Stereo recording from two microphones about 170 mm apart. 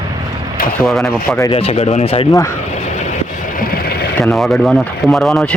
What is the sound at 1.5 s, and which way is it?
Speech, 35° left (ahead or behind).